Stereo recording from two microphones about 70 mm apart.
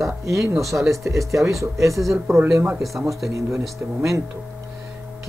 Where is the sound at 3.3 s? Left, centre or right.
Right.